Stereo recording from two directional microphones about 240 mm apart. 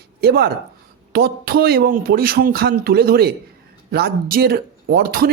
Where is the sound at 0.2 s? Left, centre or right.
Right.